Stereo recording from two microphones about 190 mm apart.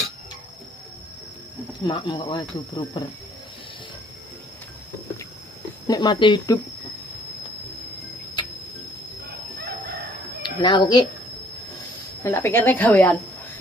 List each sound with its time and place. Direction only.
1.9 s speech: 25° left (ahead or behind)
5.9 s speech: 20° left (ahead or behind)
9.7 s chicken: 50° right (ahead or behind)
10.4 s speech: 25° left (ahead or behind)
12.2 s a woman's voice: 10° left (ahead or behind)